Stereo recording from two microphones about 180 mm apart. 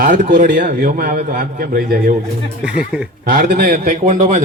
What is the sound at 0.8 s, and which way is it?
A man's voice, 50° right (ahead or behind).